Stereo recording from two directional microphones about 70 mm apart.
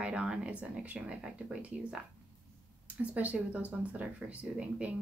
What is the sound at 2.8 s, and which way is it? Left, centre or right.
A woman's voice, centre.